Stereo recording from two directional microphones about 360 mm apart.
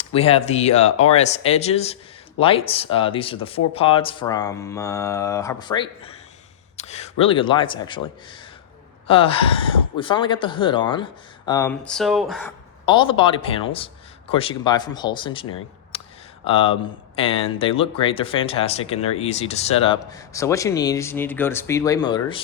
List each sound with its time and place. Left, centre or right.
0.0 s speech: centre